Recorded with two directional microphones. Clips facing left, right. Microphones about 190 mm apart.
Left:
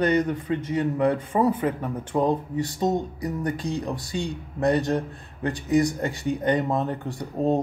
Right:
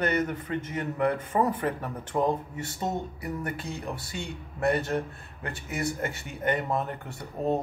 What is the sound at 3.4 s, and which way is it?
Speech, 15° left (ahead or behind).